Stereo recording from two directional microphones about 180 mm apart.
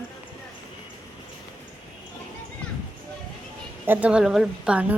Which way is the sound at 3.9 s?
10° right (ahead or behind).